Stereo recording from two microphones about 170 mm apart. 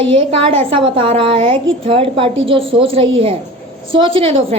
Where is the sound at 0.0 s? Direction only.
30° right (ahead or behind).